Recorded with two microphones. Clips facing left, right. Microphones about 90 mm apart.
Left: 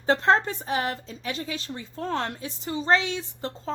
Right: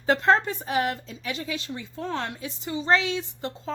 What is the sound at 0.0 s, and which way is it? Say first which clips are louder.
Speech: even; 35° left (ahead or behind).